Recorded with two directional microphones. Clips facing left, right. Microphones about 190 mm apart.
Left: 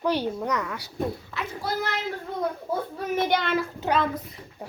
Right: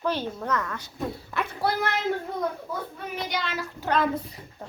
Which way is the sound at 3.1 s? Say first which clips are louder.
Left 7 dB; 55° left (ahead or behind).